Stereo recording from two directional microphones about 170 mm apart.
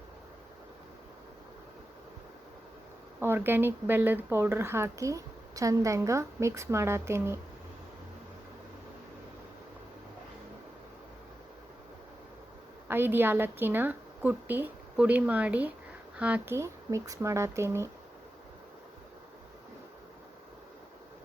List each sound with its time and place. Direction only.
3.2 s speech: 15° right (ahead or behind)
12.9 s speech: 10° right (ahead or behind)